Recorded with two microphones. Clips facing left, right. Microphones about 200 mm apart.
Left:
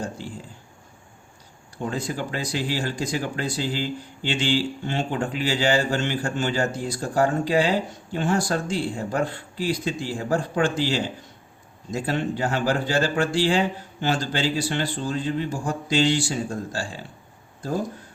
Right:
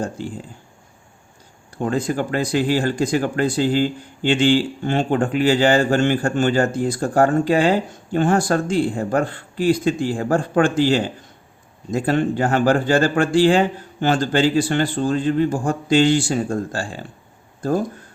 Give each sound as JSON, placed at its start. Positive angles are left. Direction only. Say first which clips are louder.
{"t": 1.8, "sound": "speech", "louder": "right 7 dB", "side_deg": -50}